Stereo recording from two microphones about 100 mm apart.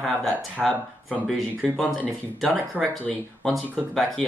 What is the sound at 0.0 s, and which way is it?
Speech, centre (ahead or behind).